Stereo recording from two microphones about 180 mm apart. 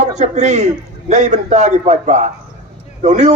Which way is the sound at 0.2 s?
40° right (ahead or behind).